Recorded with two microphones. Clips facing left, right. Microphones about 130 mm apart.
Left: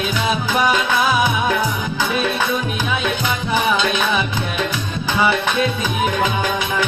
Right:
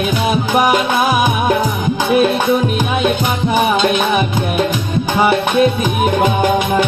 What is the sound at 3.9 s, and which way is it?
Music, 50° right (ahead or behind).